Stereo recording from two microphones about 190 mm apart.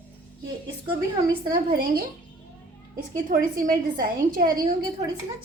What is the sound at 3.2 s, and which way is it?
A woman's voice, 50° right (ahead or behind).